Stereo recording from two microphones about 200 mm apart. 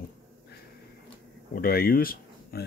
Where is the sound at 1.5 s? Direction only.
50° left (ahead or behind).